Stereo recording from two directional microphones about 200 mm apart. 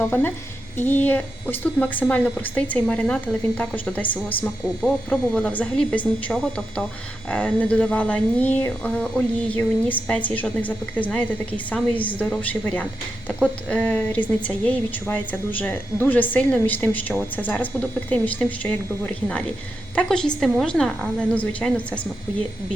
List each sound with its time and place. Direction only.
0.0 s speech: 10° left (ahead or behind)